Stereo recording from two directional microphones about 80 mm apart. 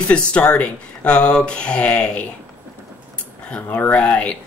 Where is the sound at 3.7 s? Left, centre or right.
Left.